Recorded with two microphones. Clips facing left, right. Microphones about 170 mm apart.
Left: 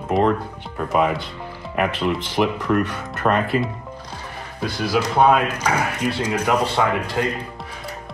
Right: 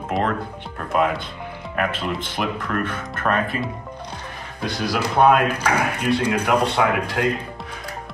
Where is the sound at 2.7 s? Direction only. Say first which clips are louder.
Left 5 dB; 20° left (ahead or behind).